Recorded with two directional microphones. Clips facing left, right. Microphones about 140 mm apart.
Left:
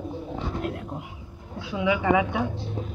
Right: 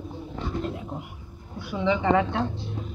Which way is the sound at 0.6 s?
Centre (ahead or behind).